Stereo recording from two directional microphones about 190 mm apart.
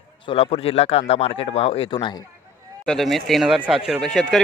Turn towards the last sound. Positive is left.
turn(degrees=5)  # may be behind; listen again after turning